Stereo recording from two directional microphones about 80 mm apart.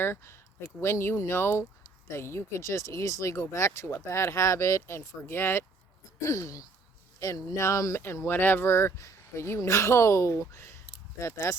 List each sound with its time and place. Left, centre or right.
0.0 s speech: left
6.2 s speech: left